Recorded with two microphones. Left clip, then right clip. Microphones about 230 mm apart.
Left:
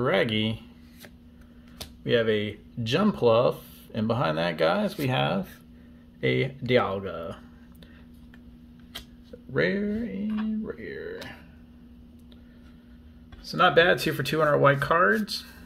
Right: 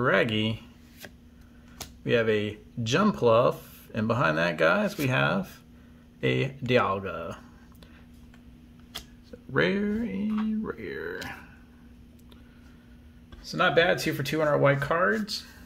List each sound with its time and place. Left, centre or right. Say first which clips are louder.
0.0 s speech: even; centre
9.5 s speech: even; centre
13.4 s speech: left 3 dB; centre